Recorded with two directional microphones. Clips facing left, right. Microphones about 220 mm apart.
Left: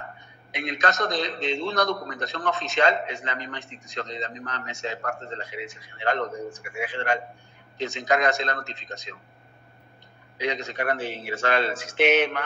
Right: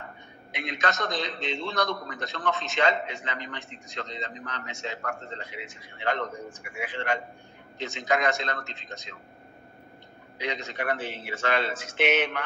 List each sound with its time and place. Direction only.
0.6 s a man's voice: 40° left (ahead or behind)
10.4 s a man's voice: 40° left (ahead or behind)